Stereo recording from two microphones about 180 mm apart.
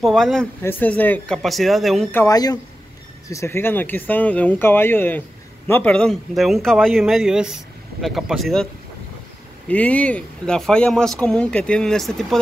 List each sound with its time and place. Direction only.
0.0 s speech: centre (ahead or behind)
2.1 s speech: 20° left (ahead or behind); by 8.6 s centre (ahead or behind)
9.7 s speech: 5° left (ahead or behind)